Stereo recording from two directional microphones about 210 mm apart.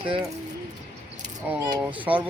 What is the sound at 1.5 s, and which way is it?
Speech, 5° right (ahead or behind).